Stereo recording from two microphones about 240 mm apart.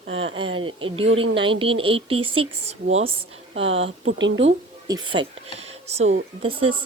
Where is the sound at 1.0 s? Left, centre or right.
Right.